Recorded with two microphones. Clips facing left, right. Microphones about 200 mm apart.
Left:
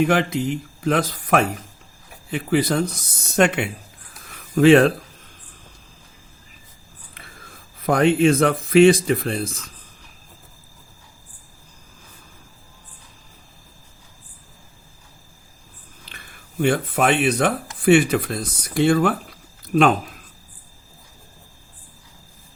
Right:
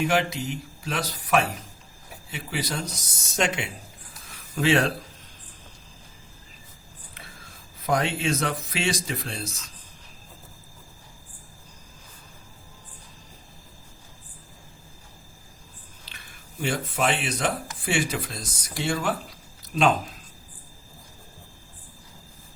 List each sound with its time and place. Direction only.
0.0 s speech: 50° left (ahead or behind)
7.1 s speech: 55° left (ahead or behind)
16.0 s speech: 55° left (ahead or behind)